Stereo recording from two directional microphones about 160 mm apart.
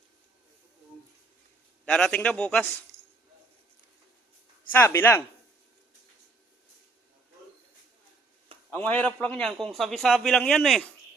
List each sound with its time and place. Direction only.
1.8 s speech: 5° left (ahead or behind)
2.9 s a sound: 15° right (ahead or behind)
4.7 s speech: 15° left (ahead or behind)
8.7 s speech: 10° left (ahead or behind)